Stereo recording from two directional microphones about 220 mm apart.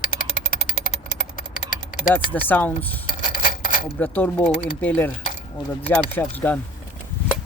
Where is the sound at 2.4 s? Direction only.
10° left (ahead or behind).